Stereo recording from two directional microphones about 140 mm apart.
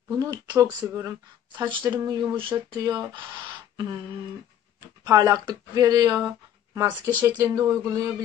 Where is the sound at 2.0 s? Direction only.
20° right (ahead or behind).